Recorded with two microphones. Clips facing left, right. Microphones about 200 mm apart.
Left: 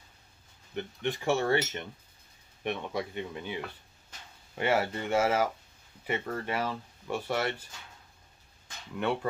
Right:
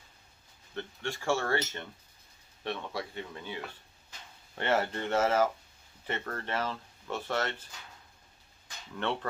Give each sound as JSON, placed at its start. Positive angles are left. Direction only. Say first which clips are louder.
{"t": 0.7, "sound": "speech", "louder": "left 4 dB", "side_deg": 20}
{"t": 9.0, "sound": "speech", "louder": "left 3 dB", "side_deg": 10}